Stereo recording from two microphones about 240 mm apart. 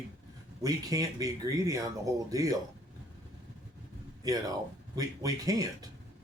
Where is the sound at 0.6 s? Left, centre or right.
Centre.